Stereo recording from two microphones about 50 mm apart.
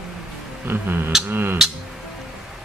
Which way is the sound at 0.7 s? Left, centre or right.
Right.